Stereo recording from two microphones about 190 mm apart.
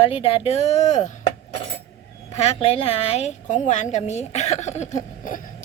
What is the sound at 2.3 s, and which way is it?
A woman's voice, 35° left (ahead or behind).